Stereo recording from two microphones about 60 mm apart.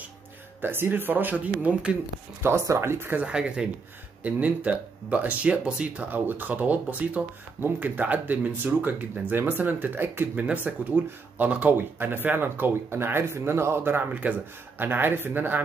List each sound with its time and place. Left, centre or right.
0.6 s speech: right; by 2.0 s centre
2.4 s speech: right
3.3 s speech: centre
6.0 s speech: right
10.4 s speech: right
14.2 s speech: right